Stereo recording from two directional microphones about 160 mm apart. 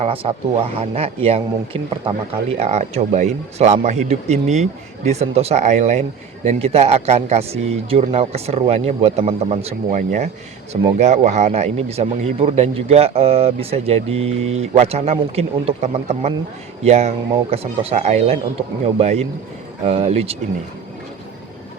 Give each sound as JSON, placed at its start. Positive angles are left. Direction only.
{"t": 0.0, "sound": "speech", "side_deg": -35}
{"t": 10.0, "sound": "speech", "side_deg": -50}